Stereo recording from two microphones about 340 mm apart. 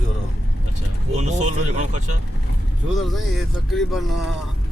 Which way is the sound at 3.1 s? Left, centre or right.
Centre.